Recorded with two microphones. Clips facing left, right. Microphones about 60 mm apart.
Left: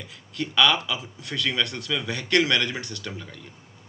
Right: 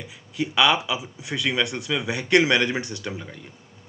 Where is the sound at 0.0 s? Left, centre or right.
Centre.